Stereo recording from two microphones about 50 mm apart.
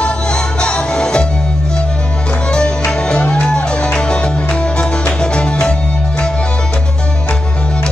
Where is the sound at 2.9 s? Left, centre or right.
Centre.